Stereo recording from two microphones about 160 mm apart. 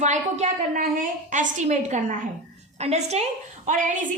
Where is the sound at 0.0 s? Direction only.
45° right (ahead or behind).